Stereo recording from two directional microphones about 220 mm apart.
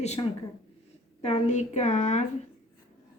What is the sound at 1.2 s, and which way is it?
A woman's voice, 30° left (ahead or behind).